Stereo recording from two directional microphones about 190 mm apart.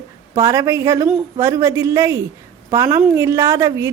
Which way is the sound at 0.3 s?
15° right (ahead or behind).